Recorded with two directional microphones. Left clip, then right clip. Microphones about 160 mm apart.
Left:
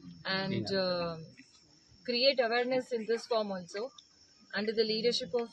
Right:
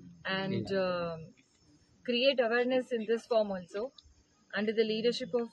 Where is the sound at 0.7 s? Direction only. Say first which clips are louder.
Even; centre (ahead or behind).